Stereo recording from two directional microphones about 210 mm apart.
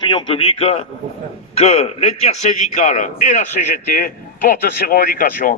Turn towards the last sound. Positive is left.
turn(degrees=45)  # may be behind; listen again after turning